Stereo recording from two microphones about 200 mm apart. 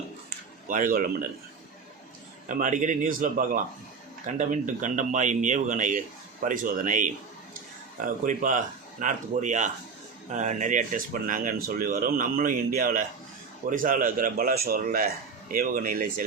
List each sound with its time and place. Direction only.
0.7 s speech: 40° right (ahead or behind)
2.5 s speech: 40° right (ahead or behind)